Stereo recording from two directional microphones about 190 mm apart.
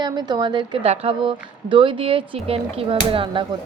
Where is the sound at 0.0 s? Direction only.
20° right (ahead or behind).